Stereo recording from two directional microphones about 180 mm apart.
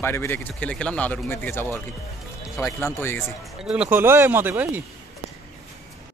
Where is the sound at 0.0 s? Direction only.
15° left (ahead or behind).